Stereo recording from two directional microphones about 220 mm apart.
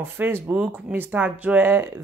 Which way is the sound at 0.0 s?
10° right (ahead or behind).